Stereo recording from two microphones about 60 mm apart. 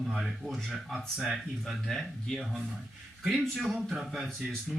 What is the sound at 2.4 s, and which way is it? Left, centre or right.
Speech, centre.